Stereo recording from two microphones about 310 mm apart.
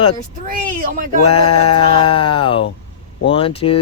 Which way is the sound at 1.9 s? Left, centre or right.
Centre.